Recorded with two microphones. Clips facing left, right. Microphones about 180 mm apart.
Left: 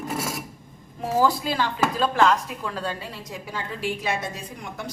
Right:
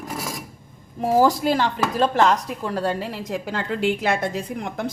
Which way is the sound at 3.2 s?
65° right (ahead or behind).